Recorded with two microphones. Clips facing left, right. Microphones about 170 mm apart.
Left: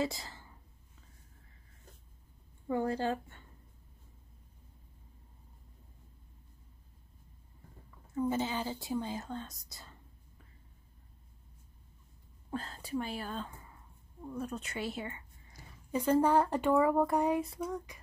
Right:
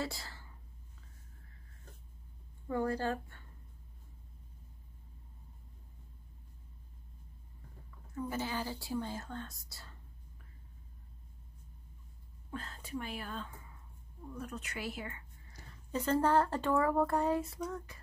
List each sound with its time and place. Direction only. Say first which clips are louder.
0.0 s whispering: left 5 dB; 20° left (ahead or behind)
2.7 s speech: left 2 dB; 20° left (ahead or behind)
8.1 s speech: left 5 dB; 20° left (ahead or behind)
12.4 s speech: left 5 dB; 35° left (ahead or behind)
15.5 s speech: left 3 dB; 10° left (ahead or behind)
17.6 s a sound: left 3 dB; 15° left (ahead or behind)